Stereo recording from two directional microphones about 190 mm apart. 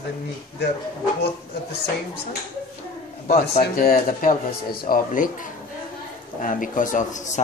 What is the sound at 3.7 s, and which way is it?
Speech, 50° left (ahead or behind).